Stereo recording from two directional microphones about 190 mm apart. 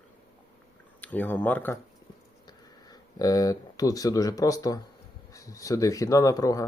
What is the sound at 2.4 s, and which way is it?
Speech, 20° left (ahead or behind).